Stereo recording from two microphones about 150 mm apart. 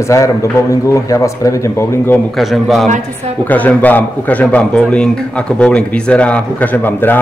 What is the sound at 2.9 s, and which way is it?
Speech, 50° right (ahead or behind).